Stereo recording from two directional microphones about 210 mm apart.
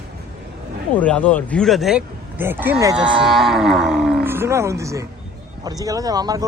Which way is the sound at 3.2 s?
Centre (ahead or behind).